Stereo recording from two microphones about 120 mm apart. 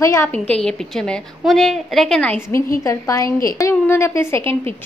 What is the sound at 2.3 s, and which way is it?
A woman's voice, 25° left (ahead or behind).